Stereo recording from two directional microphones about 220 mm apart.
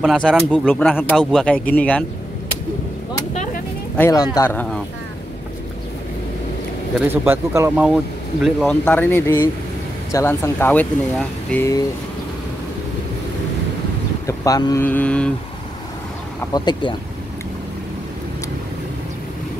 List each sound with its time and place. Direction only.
0.0 s speech: centre (ahead or behind)
3.9 s speech: 15° left (ahead or behind)
7.1 s speech: 10° right (ahead or behind); by 11.8 s 10° left (ahead or behind)
14.2 s speech: 15° left (ahead or behind)
16.5 s speech: 20° left (ahead or behind)